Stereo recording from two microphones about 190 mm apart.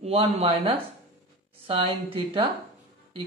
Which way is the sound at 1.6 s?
30° right (ahead or behind).